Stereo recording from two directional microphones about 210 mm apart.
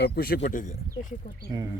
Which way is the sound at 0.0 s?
45° left (ahead or behind).